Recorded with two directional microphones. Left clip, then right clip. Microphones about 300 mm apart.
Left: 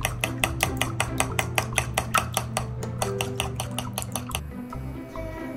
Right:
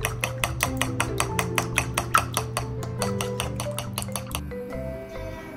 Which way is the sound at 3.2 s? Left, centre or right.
Centre.